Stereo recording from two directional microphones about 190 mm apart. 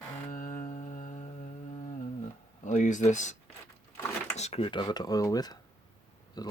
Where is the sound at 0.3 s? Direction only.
45° left (ahead or behind).